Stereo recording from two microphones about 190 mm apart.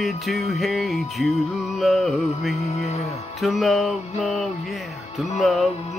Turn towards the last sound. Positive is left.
turn(degrees=0)  # may be behind; listen again after turning